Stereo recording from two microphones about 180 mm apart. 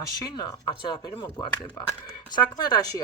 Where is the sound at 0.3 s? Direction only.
20° left (ahead or behind).